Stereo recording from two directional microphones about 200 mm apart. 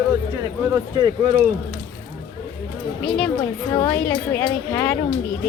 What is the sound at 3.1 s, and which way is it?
Speech, 5° left (ahead or behind).